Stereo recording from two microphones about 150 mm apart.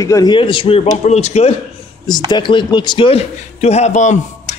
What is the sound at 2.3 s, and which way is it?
A man's voice, 30° left (ahead or behind).